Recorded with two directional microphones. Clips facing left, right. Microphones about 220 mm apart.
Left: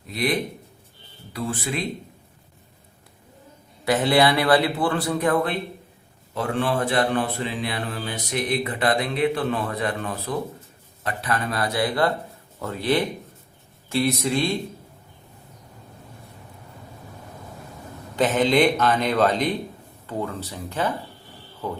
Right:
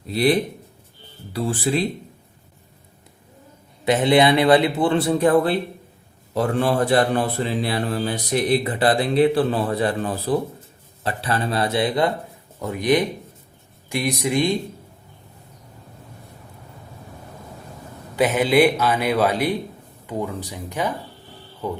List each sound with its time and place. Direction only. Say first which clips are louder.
0.1 s a man's voice: right 6 dB; 30° right (ahead or behind)
3.8 s a man's voice: right 3 dB; 20° right (ahead or behind)
18.2 s speech: right 2 dB; 10° right (ahead or behind)